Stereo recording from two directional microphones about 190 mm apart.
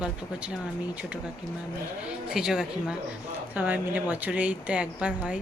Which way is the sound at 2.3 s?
5° right (ahead or behind).